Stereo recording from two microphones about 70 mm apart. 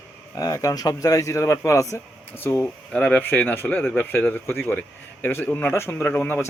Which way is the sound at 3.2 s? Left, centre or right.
Left.